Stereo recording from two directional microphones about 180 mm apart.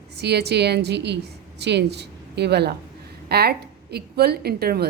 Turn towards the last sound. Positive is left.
turn(degrees=-60)  # may be behind; listen again after turning